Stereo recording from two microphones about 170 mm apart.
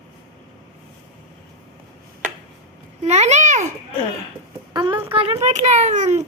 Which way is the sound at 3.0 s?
40° right (ahead or behind).